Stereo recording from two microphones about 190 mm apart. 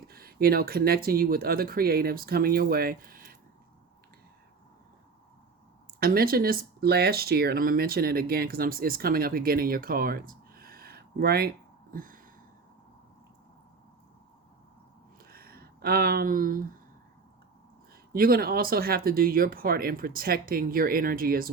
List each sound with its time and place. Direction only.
0.1 s speech: 50° right (ahead or behind)
6.0 s speech: 50° right (ahead or behind)
15.2 s a sound: 50° right (ahead or behind)
18.1 s speech: 50° right (ahead or behind)